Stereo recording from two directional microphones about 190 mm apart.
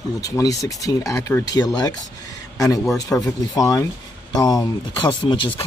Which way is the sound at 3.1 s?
20° left (ahead or behind).